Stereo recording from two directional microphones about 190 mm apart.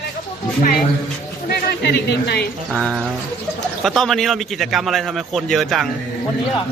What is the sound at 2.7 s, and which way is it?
Speech, centre (ahead or behind).